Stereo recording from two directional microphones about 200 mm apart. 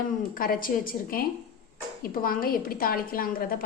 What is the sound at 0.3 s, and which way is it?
A woman's voice, 45° left (ahead or behind).